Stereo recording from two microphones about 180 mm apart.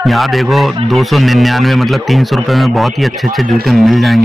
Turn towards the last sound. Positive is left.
turn(degrees=0)  # may be behind; listen again after turning